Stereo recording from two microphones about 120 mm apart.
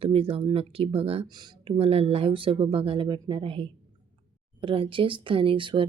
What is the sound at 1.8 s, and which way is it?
Speech, 55° right (ahead or behind).